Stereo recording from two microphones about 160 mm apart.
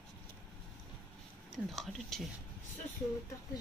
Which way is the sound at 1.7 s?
Centre (ahead or behind).